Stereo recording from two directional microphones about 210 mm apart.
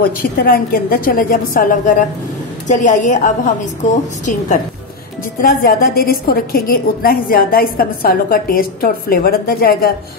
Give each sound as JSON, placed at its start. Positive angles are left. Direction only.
{"t": 0.0, "sound": "a woman's voice", "side_deg": 45}